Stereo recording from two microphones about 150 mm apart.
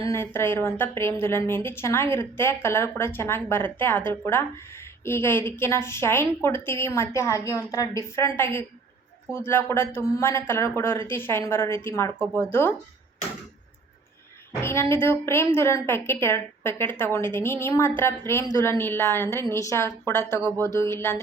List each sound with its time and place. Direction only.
0.0 s a woman's voice: 15° left (ahead or behind)
14.6 s a woman's voice: 15° left (ahead or behind)